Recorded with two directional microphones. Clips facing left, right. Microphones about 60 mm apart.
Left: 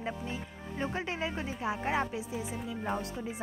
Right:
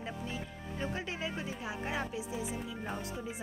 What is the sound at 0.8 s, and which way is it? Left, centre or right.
Speech, left.